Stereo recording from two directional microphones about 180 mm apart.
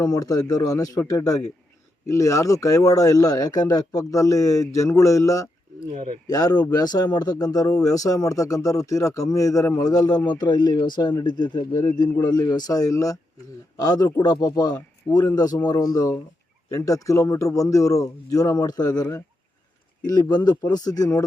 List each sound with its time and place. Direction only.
0.0 s speech: 20° left (ahead or behind)